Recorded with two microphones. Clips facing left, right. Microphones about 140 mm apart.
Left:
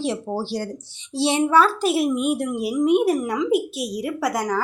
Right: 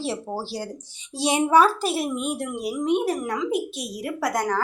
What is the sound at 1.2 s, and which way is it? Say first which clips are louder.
Speech: even; 15° right (ahead or behind).